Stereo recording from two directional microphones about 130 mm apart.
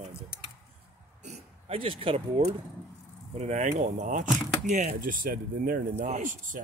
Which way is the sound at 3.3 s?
60° right (ahead or behind).